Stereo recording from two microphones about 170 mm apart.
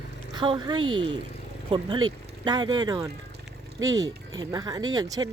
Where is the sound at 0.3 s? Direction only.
25° right (ahead or behind).